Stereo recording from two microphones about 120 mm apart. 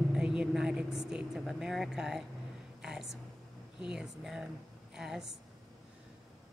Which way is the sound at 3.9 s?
5° right (ahead or behind).